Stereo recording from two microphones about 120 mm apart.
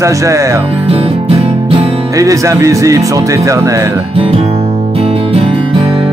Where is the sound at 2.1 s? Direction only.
30° right (ahead or behind).